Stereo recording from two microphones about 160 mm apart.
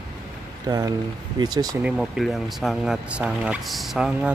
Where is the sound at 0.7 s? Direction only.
25° right (ahead or behind).